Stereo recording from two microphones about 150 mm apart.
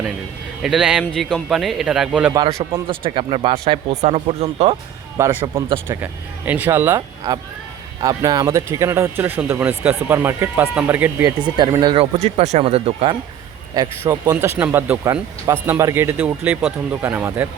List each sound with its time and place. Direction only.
0.6 s speech: 5° right (ahead or behind)
2.8 s speech: 35° right (ahead or behind)
5.1 s speech: 15° right (ahead or behind)
11.8 s speech: 35° right (ahead or behind)
12.1 s speech: 45° right (ahead or behind)
13.7 s speech: 20° right (ahead or behind)